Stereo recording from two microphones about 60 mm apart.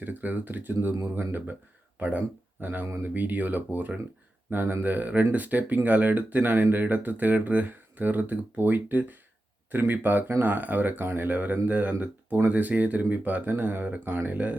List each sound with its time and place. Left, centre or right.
0.0 s speech: right